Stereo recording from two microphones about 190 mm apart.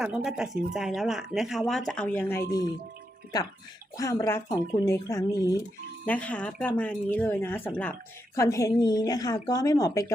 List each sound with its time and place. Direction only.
0.0 s speech: 5° right (ahead or behind); by 2.4 s 10° left (ahead or behind)
3.9 s speech: 15° left (ahead or behind)
6.1 s a woman's voice: 5° left (ahead or behind)